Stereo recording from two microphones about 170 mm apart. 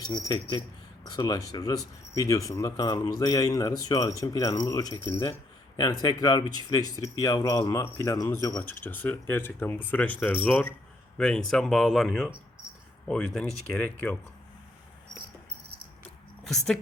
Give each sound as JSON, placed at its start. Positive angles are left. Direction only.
{"t": 0.0, "sound": "speech", "side_deg": 25}
{"t": 16.4, "sound": "a woman's voice", "side_deg": 0}